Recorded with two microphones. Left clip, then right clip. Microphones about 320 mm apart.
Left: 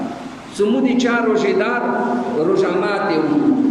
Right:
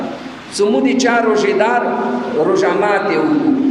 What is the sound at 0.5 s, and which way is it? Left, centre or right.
A man's voice, centre.